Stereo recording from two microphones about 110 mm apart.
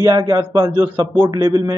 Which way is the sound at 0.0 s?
30° right (ahead or behind).